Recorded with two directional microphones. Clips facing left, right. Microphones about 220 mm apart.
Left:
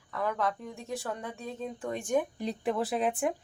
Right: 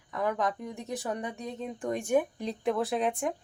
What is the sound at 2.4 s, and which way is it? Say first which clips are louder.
Speech: right 1 dB; 5° left (ahead or behind).